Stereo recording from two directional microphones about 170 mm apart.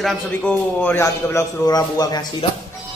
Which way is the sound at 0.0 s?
5° left (ahead or behind).